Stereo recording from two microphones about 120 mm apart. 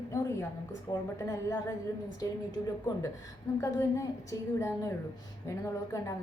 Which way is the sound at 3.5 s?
25° left (ahead or behind).